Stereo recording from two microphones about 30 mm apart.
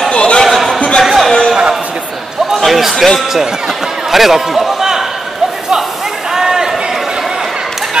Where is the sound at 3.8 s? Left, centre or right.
Centre.